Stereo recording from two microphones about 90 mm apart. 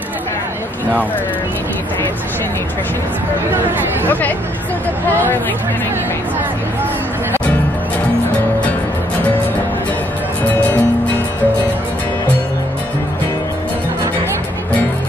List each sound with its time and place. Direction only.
10.5 s music: 20° left (ahead or behind)